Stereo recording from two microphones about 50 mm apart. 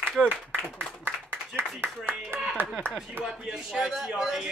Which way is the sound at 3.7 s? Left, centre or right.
Centre.